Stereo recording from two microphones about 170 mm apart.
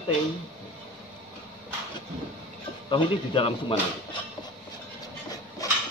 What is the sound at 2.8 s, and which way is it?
Speech, 30° left (ahead or behind).